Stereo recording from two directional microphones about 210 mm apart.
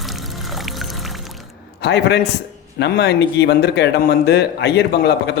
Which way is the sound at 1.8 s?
55° left (ahead or behind).